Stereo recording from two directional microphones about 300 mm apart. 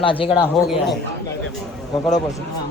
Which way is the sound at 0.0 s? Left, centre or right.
Centre.